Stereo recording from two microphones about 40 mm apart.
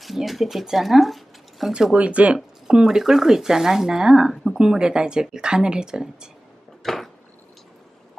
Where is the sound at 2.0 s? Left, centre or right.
Right.